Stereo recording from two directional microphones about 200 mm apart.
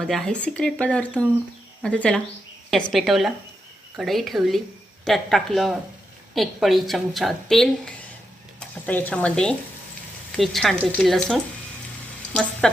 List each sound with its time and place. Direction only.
0.0 s a woman's voice: 5° left (ahead or behind)